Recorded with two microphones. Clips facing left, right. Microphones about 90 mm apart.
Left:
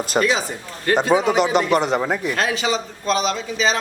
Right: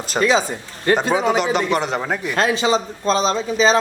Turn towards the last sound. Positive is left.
turn(degrees=-35)  # may be behind; listen again after turning